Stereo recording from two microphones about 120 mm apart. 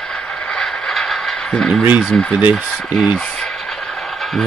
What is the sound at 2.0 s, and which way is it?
Speech, 5° left (ahead or behind).